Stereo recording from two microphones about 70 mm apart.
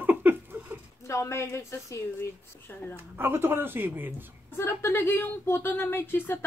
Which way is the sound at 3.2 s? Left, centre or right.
Right.